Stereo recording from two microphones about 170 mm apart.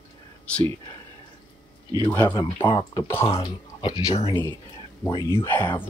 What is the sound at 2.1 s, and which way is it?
Speech, 25° left (ahead or behind).